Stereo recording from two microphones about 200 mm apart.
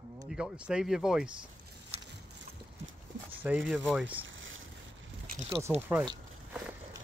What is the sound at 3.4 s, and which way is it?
Speech, 5° right (ahead or behind).